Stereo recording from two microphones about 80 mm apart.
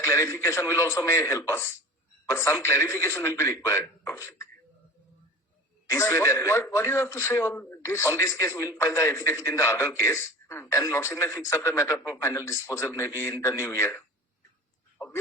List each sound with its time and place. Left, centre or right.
0.0 s a man's voice: left
5.9 s a man's voice: left
12.0 s speech: left
12.3 s a man's voice: left